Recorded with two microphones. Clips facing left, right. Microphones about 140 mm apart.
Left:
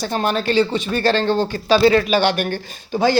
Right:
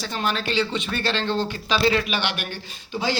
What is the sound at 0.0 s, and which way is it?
Speech, 45° left (ahead or behind).